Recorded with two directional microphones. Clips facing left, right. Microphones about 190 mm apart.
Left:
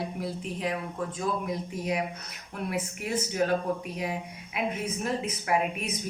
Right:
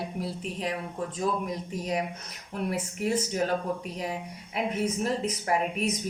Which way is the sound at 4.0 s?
40° right (ahead or behind).